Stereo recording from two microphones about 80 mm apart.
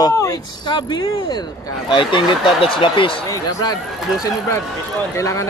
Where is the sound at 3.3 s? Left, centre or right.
Left.